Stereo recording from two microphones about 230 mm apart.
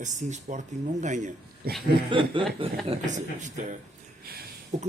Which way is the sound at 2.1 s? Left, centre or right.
Right.